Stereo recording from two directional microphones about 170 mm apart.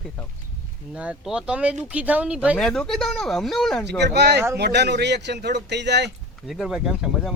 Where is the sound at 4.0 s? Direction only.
80° right.